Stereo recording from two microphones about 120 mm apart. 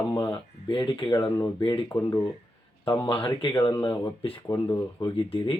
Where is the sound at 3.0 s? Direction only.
45° left (ahead or behind).